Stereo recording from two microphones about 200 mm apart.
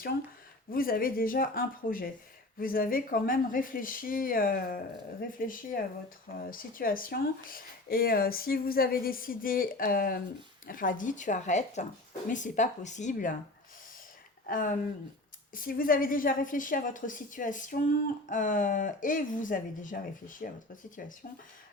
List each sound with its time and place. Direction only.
0.7 s a woman's voice: 45° left (ahead or behind)
14.4 s a woman's voice: 40° left (ahead or behind)